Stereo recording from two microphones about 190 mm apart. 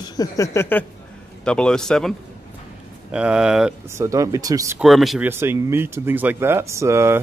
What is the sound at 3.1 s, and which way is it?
Speech, 5° right (ahead or behind).